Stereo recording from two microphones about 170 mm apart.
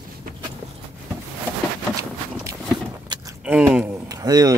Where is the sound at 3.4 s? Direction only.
10° right (ahead or behind).